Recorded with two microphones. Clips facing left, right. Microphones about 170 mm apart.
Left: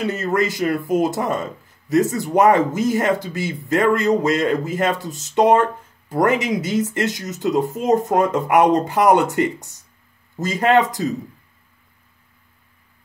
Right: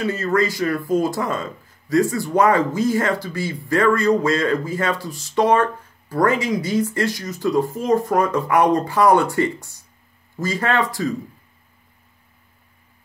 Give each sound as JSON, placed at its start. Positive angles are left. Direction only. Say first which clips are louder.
{"t": 0.0, "sound": "a man's voice", "louder": "even", "side_deg": 20}